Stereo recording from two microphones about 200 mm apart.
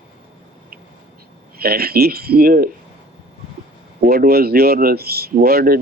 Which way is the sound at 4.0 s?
50° right (ahead or behind).